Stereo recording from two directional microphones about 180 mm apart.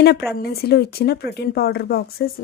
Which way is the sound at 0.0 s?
65° left (ahead or behind).